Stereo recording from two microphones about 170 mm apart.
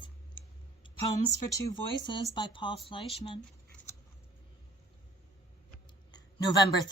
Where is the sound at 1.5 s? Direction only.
25° left (ahead or behind).